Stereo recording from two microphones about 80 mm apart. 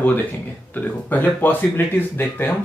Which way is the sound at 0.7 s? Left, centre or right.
Left.